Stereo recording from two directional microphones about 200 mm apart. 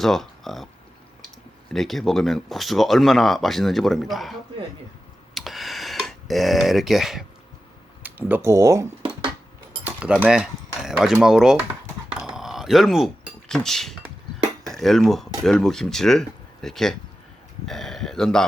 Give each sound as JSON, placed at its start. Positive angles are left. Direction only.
{"t": 0.0, "sound": "speech", "side_deg": 0}
{"t": 1.7, "sound": "speech", "side_deg": 0}
{"t": 5.3, "sound": "a sound", "side_deg": 0}
{"t": 8.0, "sound": "speech", "side_deg": -10}
{"t": 12.2, "sound": "a sound", "side_deg": -5}
{"t": 14.6, "sound": "speech", "side_deg": 0}